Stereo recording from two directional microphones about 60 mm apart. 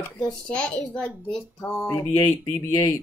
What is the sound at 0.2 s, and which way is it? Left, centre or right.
A woman's voice, centre.